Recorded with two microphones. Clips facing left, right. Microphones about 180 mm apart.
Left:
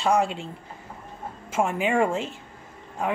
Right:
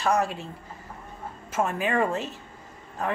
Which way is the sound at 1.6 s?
15° left (ahead or behind).